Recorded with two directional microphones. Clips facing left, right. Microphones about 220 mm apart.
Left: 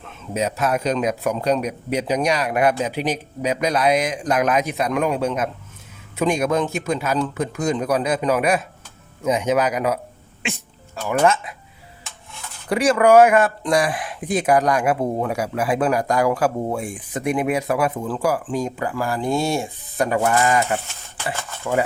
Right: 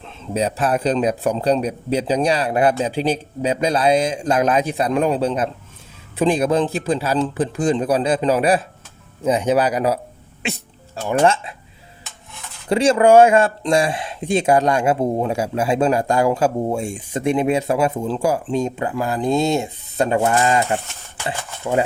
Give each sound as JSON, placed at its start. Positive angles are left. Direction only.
{"t": 0.0, "sound": "speech", "side_deg": -30}
{"t": 12.6, "sound": "speech", "side_deg": -25}
{"t": 21.2, "sound": "stir", "side_deg": -20}